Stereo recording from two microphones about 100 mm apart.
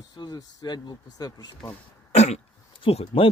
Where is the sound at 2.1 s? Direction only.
90° left.